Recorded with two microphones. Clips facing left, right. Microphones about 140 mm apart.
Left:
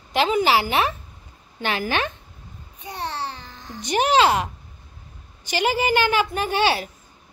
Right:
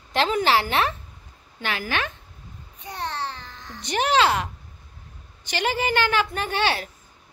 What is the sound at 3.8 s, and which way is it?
A woman's voice, 15° left (ahead or behind).